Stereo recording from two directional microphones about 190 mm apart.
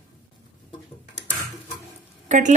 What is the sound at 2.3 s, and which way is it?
Speech, 40° right (ahead or behind).